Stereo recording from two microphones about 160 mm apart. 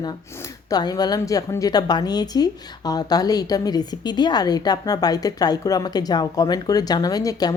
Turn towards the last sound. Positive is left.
turn(degrees=25)  # may be behind; listen again after turning